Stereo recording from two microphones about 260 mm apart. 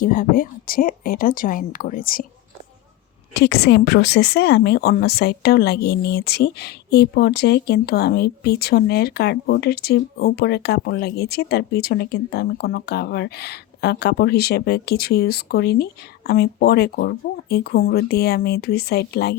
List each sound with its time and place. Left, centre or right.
0.0 s speech: left
3.3 s speech: left